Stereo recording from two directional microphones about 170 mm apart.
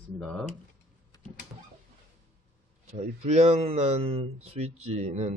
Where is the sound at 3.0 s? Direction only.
45° right (ahead or behind).